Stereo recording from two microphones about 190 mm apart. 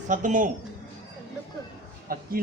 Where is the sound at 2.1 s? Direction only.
50° right (ahead or behind).